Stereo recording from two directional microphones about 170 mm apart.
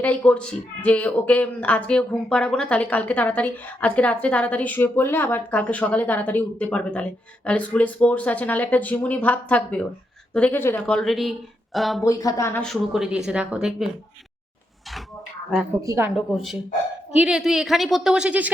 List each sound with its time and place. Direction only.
0.0 s a woman's voice: 10° left (ahead or behind)
12.0 s speech: 20° left (ahead or behind)
12.6 s a woman's voice: centre (ahead or behind)
15.8 s a woman's voice: 15° right (ahead or behind)
16.1 s a woman's voice: centre (ahead or behind)